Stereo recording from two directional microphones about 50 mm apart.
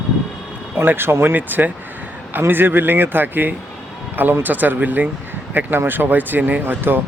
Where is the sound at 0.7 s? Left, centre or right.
Right.